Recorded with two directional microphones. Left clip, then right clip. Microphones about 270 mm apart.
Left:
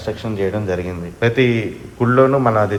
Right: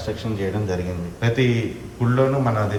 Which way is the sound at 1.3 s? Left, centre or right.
Right.